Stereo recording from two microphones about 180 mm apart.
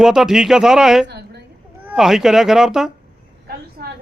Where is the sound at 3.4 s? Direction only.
60° right (ahead or behind).